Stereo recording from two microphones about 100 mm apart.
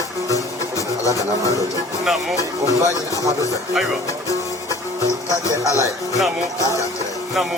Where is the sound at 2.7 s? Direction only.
35° right (ahead or behind).